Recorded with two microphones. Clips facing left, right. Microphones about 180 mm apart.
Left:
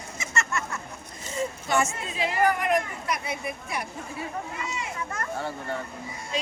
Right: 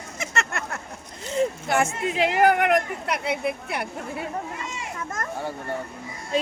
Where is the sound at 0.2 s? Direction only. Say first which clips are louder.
Right 1 dB; 60° right (ahead or behind).